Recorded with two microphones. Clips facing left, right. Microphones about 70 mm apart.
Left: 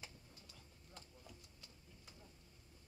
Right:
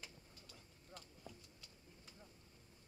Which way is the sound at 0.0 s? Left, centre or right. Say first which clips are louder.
Even; left.